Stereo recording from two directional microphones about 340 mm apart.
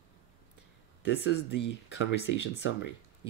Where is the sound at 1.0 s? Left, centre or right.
Left.